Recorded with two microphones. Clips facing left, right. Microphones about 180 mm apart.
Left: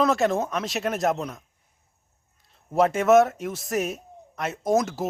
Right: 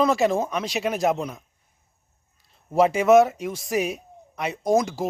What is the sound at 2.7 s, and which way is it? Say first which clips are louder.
A man's voice: right 2 dB; centre (ahead or behind).